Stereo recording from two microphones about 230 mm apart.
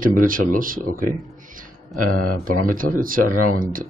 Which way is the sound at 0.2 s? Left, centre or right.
Right.